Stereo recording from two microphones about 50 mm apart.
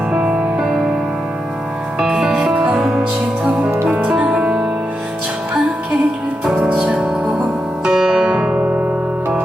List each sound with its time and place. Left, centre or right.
0.1 s music: centre
2.0 s music: centre
3.8 s music: right
6.4 s music: centre